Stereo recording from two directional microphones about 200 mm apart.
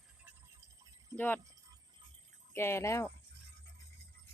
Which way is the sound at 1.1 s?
10° left (ahead or behind).